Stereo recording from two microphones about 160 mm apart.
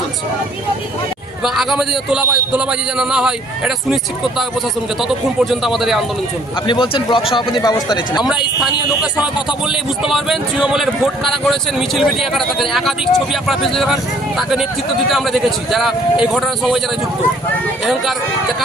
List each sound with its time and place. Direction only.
1.5 s a man's voice: 5° right (ahead or behind)
5.0 s a man's voice: centre (ahead or behind)
6.7 s a man's voice: 30° left (ahead or behind)
8.2 s a man's voice: 5° right (ahead or behind)